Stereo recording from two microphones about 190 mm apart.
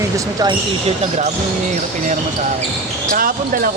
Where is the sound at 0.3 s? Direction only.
25° right (ahead or behind).